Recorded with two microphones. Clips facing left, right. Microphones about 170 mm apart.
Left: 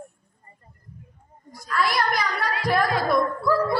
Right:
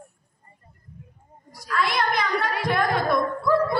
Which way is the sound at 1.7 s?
20° right (ahead or behind).